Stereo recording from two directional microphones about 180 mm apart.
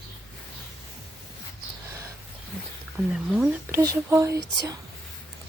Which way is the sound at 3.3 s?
5° right (ahead or behind).